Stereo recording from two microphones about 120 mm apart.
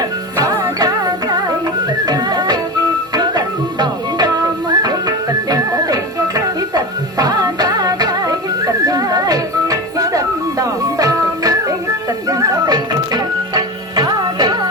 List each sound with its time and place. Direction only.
0.0 s music: 30° right (ahead or behind)